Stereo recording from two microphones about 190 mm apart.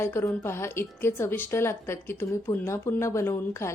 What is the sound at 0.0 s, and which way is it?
A woman's voice, 15° left (ahead or behind).